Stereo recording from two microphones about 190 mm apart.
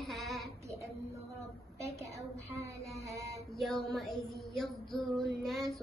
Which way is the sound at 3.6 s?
Centre (ahead or behind).